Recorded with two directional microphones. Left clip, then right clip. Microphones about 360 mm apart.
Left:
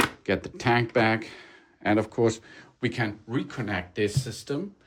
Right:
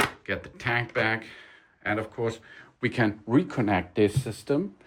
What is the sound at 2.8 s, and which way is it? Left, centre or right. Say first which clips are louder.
Speech: right 3 dB; centre.